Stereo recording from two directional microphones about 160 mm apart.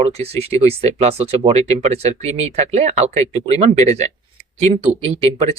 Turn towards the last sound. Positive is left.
turn(degrees=-35)  # may be behind; listen again after turning